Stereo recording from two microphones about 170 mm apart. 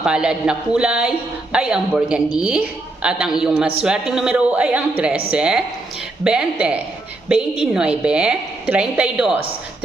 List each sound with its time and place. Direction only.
0.0 s a woman's voice: 5° right (ahead or behind)